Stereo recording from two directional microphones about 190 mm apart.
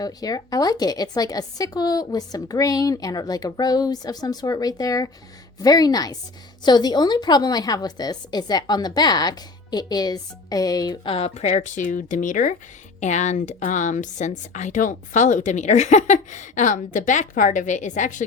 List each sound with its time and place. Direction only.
0.0 s a woman's voice: 20° left (ahead or behind); by 18.2 s 40° left (ahead or behind)